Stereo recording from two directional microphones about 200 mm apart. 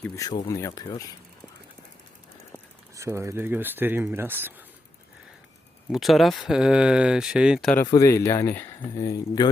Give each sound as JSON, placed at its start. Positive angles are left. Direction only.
{"t": 0.0, "sound": "speech", "side_deg": 15}
{"t": 2.9, "sound": "speech", "side_deg": -15}
{"t": 5.9, "sound": "speech", "side_deg": 0}
{"t": 7.8, "sound": "speech", "side_deg": 15}